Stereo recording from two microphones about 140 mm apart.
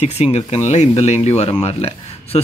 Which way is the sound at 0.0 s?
50° left (ahead or behind).